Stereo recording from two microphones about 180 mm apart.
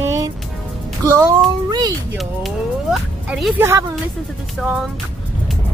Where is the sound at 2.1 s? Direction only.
Centre (ahead or behind).